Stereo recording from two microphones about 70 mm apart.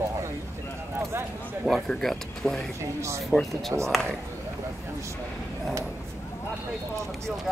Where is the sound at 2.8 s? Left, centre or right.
Right.